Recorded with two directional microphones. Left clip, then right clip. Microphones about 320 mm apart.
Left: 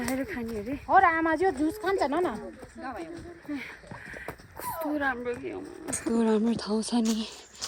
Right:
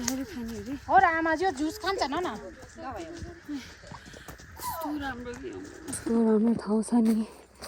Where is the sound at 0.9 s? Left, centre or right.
Right.